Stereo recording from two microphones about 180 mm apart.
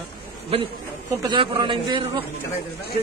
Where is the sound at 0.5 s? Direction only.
30° right (ahead or behind).